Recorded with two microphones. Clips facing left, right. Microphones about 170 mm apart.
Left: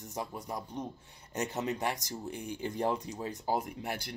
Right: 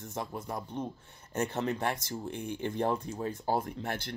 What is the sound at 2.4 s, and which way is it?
Speech, 55° right (ahead or behind).